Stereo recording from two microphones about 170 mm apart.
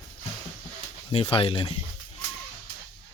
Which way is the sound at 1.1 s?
35° left (ahead or behind).